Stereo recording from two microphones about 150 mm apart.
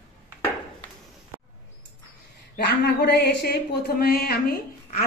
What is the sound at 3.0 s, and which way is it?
A woman's voice, 90° left.